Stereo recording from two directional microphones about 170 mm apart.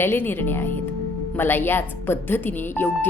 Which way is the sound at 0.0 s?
15° left (ahead or behind).